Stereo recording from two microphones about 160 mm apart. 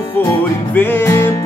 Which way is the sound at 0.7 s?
15° left (ahead or behind).